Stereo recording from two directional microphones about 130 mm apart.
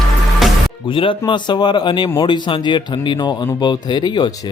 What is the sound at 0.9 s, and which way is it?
Speech, 40° left (ahead or behind).